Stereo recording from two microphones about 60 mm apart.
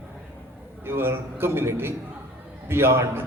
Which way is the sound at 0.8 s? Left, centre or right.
Right.